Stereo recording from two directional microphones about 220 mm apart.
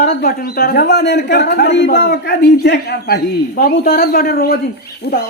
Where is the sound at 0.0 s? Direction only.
40° left (ahead or behind).